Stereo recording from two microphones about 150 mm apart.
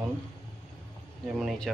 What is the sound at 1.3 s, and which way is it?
Speech, centre (ahead or behind).